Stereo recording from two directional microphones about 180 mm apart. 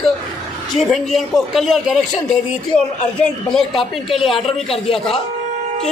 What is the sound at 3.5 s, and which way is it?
Speech, centre (ahead or behind).